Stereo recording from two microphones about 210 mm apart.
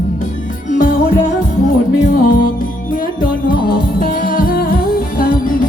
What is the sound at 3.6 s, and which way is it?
Music, 45° left (ahead or behind).